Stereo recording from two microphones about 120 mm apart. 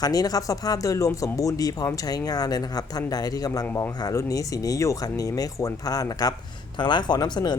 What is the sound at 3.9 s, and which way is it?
Speech, 35° left (ahead or behind).